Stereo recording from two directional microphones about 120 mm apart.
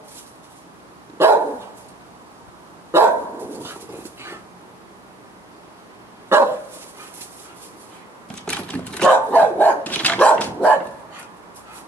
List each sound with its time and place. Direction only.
1.2 s dog: 20° right (ahead or behind)
2.9 s dog: 20° right (ahead or behind)
6.2 s dog: 20° right (ahead or behind)
8.5 s dog: 10° left (ahead or behind)